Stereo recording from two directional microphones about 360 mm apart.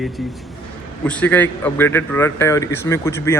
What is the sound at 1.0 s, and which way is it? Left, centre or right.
A man's voice, centre.